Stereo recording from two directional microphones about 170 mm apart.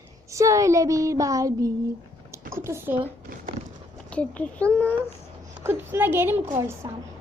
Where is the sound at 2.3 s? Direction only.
15° right (ahead or behind).